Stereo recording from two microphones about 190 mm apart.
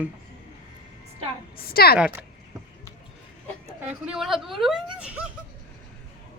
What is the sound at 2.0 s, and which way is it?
Speech, 5° right (ahead or behind).